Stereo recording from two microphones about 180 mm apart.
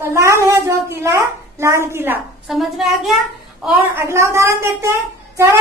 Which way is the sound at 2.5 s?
Centre (ahead or behind).